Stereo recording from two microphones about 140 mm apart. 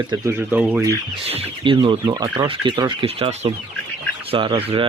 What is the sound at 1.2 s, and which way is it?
Speech, 45° right (ahead or behind).